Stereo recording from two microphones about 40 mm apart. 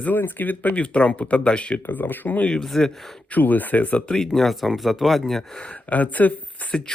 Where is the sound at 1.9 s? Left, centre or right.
Left.